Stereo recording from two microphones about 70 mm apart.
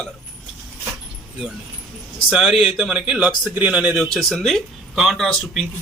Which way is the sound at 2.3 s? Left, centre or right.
Centre.